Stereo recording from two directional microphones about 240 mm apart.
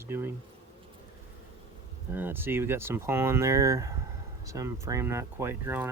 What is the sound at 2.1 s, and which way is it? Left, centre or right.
Speech, centre.